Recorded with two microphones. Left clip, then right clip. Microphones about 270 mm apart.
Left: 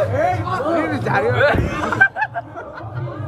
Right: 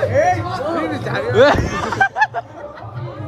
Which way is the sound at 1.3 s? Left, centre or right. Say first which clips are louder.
Right 4 dB; centre.